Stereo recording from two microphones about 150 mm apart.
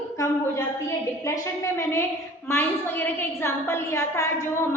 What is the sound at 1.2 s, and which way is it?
A woman's voice, 20° left (ahead or behind).